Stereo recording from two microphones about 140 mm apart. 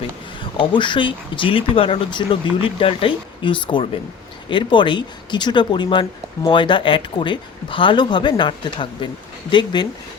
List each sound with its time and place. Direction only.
0.6 s speech: 35° left (ahead or behind)